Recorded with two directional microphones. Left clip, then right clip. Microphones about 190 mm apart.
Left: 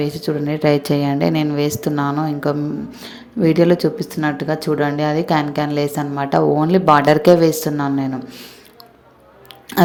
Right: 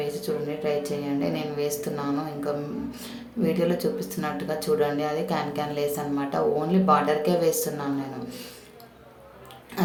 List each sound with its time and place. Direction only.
0.0 s a woman's voice: 40° left (ahead or behind)